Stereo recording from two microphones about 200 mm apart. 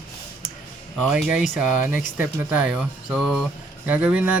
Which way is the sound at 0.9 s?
Centre (ahead or behind).